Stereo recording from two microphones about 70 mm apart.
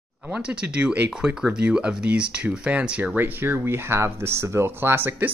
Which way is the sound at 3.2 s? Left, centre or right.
Right.